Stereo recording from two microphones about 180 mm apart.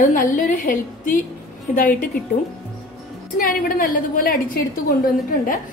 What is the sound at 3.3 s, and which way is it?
A woman's voice, 50° left (ahead or behind).